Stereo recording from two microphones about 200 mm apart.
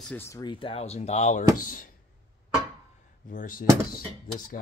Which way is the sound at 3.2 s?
40° left (ahead or behind).